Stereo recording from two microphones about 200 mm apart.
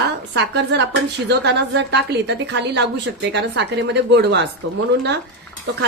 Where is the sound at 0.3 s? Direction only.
60° right (ahead or behind).